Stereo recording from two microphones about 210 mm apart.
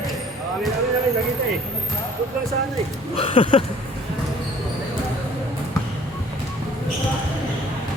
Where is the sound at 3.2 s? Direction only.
25° left (ahead or behind).